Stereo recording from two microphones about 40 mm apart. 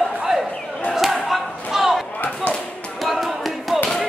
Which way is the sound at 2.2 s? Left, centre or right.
Left.